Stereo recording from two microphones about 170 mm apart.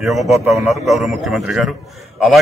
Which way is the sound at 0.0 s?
Centre (ahead or behind).